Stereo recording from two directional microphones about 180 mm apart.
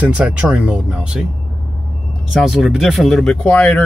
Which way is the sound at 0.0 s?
5° right (ahead or behind).